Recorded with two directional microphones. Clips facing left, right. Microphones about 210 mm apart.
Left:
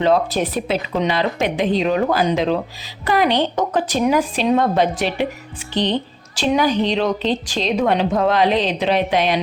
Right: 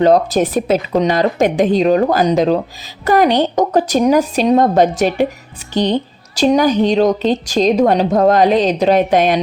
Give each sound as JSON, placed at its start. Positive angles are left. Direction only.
{"t": 0.0, "sound": "a woman's voice", "side_deg": -40}